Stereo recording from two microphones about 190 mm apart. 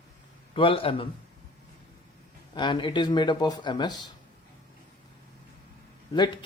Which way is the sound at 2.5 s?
25° left (ahead or behind).